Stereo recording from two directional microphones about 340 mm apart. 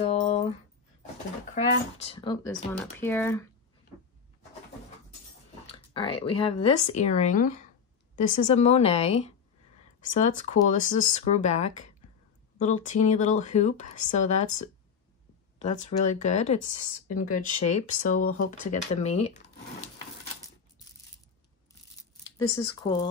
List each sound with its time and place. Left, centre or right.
0.0 s a sound: centre
1.5 s speech: centre
5.9 s speech: centre
15.6 s speech: centre
22.6 s speech: centre